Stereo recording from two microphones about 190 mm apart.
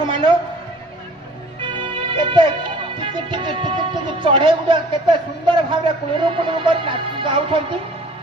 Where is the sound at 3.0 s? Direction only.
25° right (ahead or behind).